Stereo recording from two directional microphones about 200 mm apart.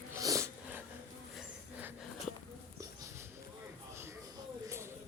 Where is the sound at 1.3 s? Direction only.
10° right (ahead or behind).